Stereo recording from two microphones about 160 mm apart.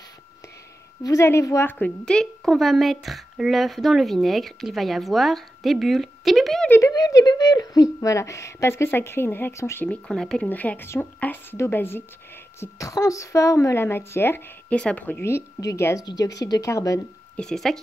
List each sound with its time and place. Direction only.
1.0 s a woman's voice: 20° left (ahead or behind); by 6.7 s centre (ahead or behind)
6.7 s speech: 20° left (ahead or behind)
10.0 s a woman's voice: 5° left (ahead or behind); by 17.0 s 20° left (ahead or behind)
17.4 s a woman's voice: 5° left (ahead or behind)